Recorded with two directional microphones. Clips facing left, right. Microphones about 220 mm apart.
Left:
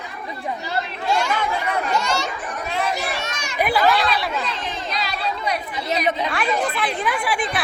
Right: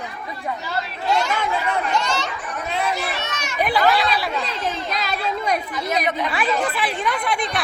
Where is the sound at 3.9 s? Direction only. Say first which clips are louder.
Even; centre (ahead or behind).